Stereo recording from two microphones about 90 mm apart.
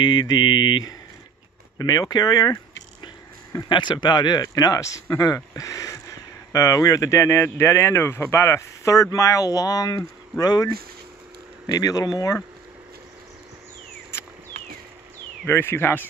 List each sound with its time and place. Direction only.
0.0 s mantra: 55° left (ahead or behind)
1.8 s speech: 45° left (ahead or behind)
3.6 s speech: 60° left (ahead or behind); by 12.4 s 40° left (ahead or behind)
15.4 s speech: 25° left (ahead or behind)